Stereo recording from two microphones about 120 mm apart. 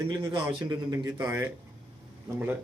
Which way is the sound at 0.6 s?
30° right (ahead or behind).